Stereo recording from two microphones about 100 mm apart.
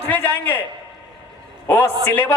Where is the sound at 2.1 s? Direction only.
15° left (ahead or behind).